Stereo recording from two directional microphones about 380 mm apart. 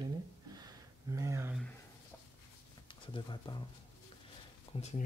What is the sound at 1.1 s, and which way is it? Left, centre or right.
Speech, centre.